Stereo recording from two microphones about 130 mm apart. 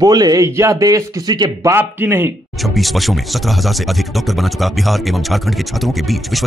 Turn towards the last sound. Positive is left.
turn(degrees=0)  # may be behind; listen again after turning